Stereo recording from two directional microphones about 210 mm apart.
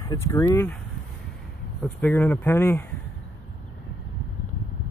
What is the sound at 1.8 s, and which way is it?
Speech, 10° left (ahead or behind).